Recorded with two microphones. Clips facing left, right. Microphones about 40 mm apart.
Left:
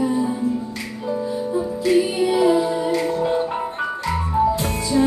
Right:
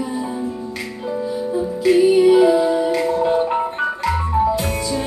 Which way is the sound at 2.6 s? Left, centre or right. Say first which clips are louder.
Right 3 dB; centre.